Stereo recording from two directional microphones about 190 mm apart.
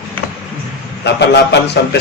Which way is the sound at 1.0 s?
65° left (ahead or behind).